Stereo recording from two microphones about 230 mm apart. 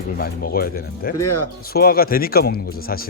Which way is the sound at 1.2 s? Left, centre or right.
Left.